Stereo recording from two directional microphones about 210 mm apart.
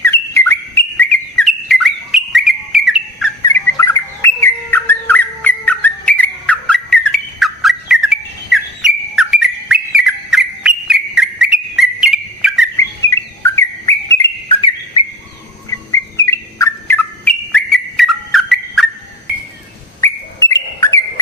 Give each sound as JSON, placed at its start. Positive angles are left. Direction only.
{"t": 0.0, "sound": "bird", "side_deg": 10}
{"t": 3.4, "sound": "bird", "side_deg": 15}
{"t": 13.4, "sound": "bird", "side_deg": 10}
{"t": 20.0, "sound": "bird", "side_deg": 15}